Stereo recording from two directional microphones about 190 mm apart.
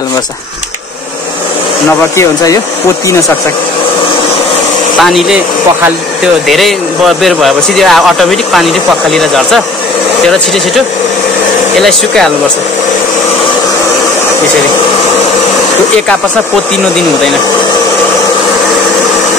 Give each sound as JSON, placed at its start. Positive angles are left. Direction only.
{"t": 2.1, "sound": "speech", "side_deg": 20}
{"t": 5.0, "sound": "speech", "side_deg": 0}